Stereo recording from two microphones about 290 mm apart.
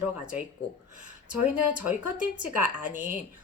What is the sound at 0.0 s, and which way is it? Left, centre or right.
Speech, centre.